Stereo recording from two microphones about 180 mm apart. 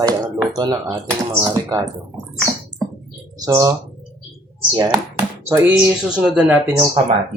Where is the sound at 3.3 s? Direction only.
20° right (ahead or behind).